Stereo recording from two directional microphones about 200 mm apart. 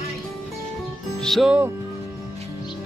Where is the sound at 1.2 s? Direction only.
Centre (ahead or behind).